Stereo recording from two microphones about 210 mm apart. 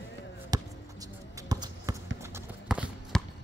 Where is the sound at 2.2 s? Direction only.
10° right (ahead or behind).